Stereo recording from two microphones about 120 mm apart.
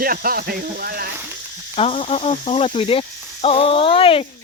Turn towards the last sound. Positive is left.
turn(degrees=50)  # may be behind; listen again after turning